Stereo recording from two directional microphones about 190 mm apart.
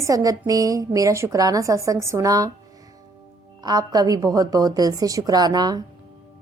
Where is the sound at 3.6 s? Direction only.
20° right (ahead or behind).